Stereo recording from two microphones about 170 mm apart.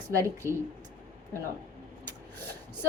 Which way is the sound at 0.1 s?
15° right (ahead or behind).